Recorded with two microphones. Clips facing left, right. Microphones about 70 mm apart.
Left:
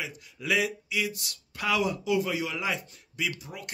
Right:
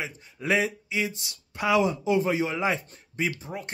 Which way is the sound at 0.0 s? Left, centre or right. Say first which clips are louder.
Right 3 dB; right.